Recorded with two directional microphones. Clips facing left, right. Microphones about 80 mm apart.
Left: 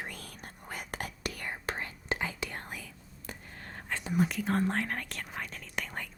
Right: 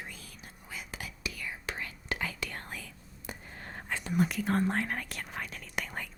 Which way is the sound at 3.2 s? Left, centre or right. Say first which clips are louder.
Right 1 dB; centre.